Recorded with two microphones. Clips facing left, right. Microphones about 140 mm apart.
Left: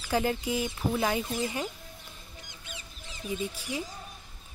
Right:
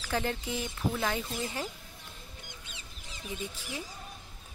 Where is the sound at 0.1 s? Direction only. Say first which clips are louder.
Left 5 dB; 10° left (ahead or behind).